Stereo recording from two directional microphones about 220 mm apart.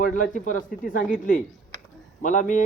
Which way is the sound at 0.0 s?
35° left (ahead or behind).